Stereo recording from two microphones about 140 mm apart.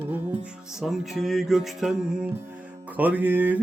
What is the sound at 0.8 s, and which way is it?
Music, centre (ahead or behind).